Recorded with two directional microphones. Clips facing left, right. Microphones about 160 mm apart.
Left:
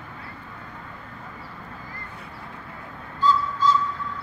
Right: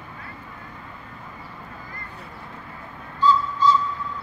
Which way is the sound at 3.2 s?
50° left (ahead or behind).